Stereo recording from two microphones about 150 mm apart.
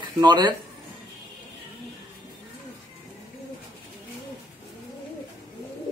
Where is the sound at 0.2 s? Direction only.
30° right (ahead or behind).